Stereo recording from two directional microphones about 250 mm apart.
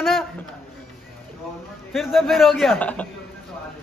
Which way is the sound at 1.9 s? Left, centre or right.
Centre.